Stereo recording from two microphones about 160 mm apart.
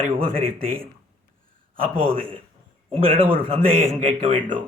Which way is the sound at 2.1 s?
35° right (ahead or behind).